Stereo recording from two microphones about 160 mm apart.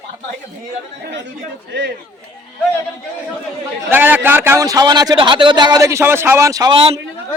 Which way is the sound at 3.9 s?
10° right (ahead or behind).